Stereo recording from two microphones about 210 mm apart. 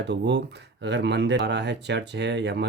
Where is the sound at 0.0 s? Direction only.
55° right (ahead or behind).